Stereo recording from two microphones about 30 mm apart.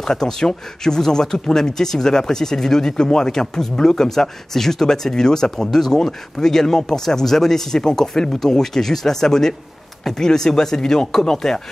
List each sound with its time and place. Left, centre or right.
0.0 s speech: centre